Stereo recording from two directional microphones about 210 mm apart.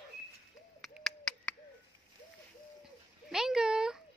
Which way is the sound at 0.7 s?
Centre (ahead or behind).